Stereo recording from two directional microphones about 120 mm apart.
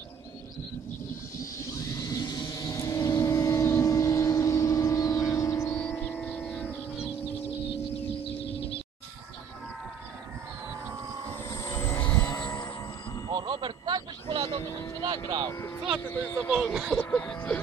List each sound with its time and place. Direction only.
2.0 s vehicle: 30° left (ahead or behind)
11.4 s vehicle: 30° left (ahead or behind)
13.3 s vehicle: 45° right (ahead or behind)
15.0 s speech: 40° right (ahead or behind)
16.7 s speech: 5° right (ahead or behind)
17.0 s speech: 15° left (ahead or behind)